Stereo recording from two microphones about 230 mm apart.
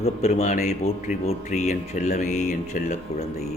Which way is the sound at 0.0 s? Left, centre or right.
Left.